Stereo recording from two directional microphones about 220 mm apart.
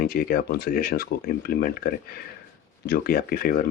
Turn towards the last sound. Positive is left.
turn(degrees=40)  # may be behind; listen again after turning